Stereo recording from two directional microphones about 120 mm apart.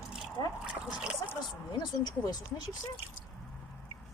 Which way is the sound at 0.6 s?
5° right (ahead or behind).